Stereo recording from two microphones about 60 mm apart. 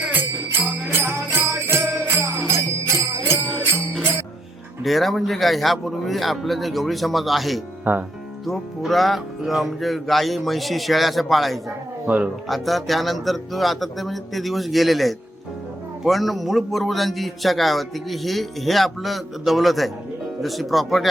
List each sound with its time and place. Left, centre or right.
0.1 s music: right
4.8 s a man's voice: centre
7.9 s speech: right
8.4 s a man's voice: centre
12.0 s speech: right
12.5 s a man's voice: centre